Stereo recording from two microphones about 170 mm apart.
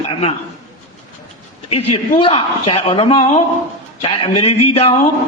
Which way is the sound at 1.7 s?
35° left (ahead or behind).